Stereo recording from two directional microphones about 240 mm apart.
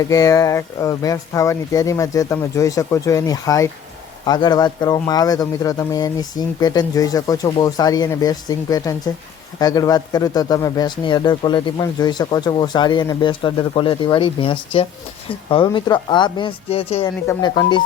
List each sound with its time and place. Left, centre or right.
0.0 s a man's voice: centre